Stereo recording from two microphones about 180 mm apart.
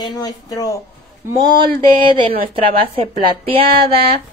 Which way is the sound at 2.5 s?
30° right (ahead or behind).